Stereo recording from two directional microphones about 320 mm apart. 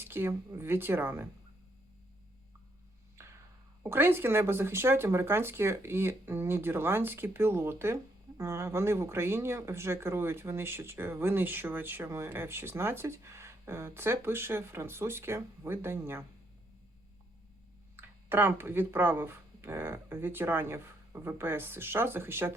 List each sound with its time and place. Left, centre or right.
0.0 s speech: centre
3.8 s speech: centre
17.9 s speech: centre